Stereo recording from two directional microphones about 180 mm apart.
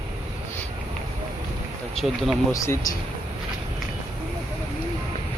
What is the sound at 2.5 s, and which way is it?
Speech, 15° left (ahead or behind).